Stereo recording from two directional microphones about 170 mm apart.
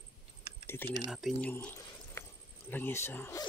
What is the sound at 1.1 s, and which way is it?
Speech, centre (ahead or behind).